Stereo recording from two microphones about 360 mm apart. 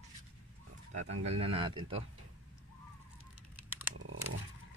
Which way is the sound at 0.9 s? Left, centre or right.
Centre.